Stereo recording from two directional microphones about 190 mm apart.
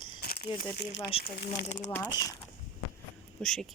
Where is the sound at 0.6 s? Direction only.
60° left (ahead or behind).